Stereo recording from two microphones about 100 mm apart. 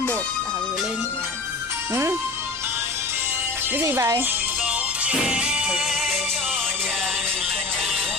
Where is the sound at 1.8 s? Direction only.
25° right (ahead or behind).